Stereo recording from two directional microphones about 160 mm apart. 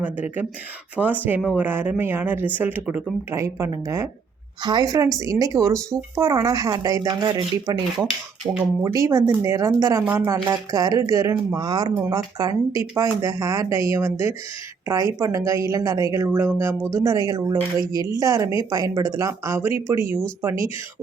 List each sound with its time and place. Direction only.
0.0 s speech: 10° right (ahead or behind)